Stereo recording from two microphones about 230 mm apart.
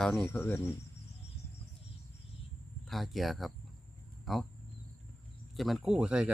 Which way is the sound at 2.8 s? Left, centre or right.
Centre.